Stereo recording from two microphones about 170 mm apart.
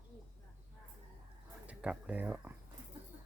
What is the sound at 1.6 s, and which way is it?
Speech, 5° right (ahead or behind).